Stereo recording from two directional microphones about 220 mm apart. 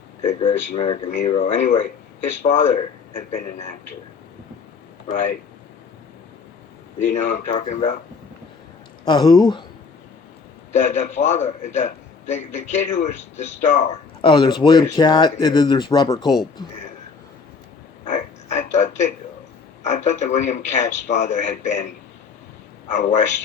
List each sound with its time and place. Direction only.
0.3 s a man's voice: 25° left (ahead or behind)
5.1 s a man's voice: 35° left (ahead or behind)
7.0 s a man's voice: 35° left (ahead or behind)
9.0 s speech: 20° left (ahead or behind)
10.7 s a man's voice: 30° left (ahead or behind)
18.0 s a sound: 35° left (ahead or behind)
19.8 s a man's voice: 35° left (ahead or behind)